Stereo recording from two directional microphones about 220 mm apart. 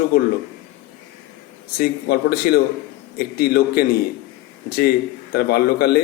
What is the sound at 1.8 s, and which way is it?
Speech, 45° left (ahead or behind).